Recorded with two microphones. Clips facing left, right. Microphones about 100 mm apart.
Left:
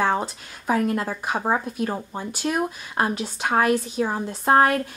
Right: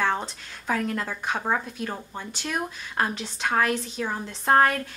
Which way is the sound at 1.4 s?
20° left (ahead or behind).